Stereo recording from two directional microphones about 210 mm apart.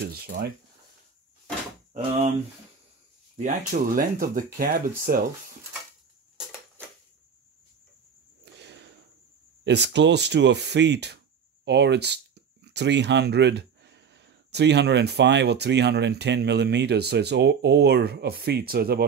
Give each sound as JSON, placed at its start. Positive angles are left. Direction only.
{"t": 0.0, "sound": "speech", "side_deg": -45}
{"t": 3.3, "sound": "speech", "side_deg": -40}
{"t": 8.5, "sound": "a sound", "side_deg": -55}
{"t": 9.7, "sound": "speech", "side_deg": -55}